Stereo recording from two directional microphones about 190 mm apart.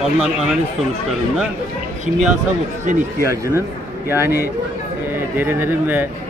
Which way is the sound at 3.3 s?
15° right (ahead or behind).